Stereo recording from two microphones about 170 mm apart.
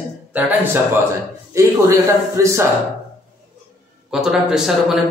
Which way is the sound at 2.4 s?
15° right (ahead or behind).